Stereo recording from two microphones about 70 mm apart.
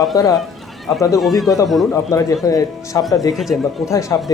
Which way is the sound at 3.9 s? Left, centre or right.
Left.